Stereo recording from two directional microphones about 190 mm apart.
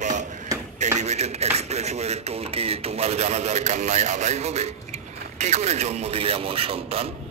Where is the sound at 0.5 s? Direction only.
20° right (ahead or behind).